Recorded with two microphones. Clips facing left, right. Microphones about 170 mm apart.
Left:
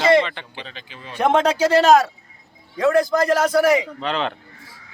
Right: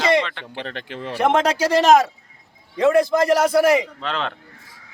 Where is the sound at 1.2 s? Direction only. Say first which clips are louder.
Left 1 dB; 10° right (ahead or behind); by 3.2 s 25° right (ahead or behind).